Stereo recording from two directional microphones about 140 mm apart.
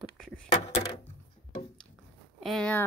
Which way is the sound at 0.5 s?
50° left (ahead or behind).